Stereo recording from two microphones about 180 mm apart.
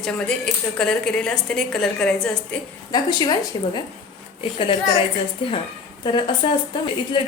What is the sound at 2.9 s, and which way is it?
Speech, 25° left (ahead or behind).